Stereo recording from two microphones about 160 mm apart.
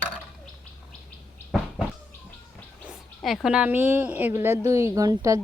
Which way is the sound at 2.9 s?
Centre (ahead or behind).